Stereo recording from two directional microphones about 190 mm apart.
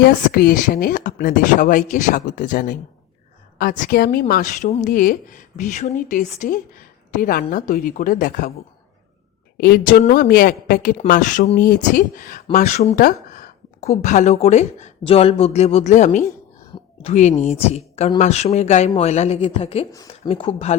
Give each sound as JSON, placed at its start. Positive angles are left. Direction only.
{"t": 0.0, "sound": "a woman's voice", "side_deg": 50}
{"t": 9.6, "sound": "a woman's voice", "side_deg": 55}